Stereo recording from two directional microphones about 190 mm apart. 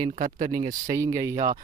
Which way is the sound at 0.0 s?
40° right (ahead or behind).